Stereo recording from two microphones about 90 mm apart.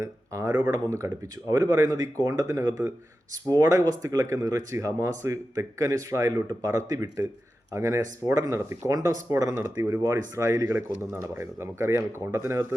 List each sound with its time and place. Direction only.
0.0 s speech: 35° right (ahead or behind)
0.5 s speech: 45° right (ahead or behind); by 12.6 s 30° right (ahead or behind)